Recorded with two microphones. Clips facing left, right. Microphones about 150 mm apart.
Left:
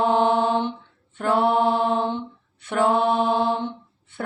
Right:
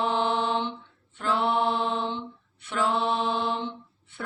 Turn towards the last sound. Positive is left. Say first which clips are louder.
# left 6 dB
turn(degrees=50)  # may be behind; listen again after turning